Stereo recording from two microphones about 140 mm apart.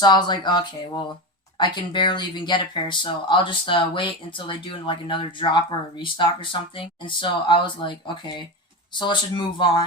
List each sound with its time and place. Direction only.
0.0 s speech: 30° left (ahead or behind)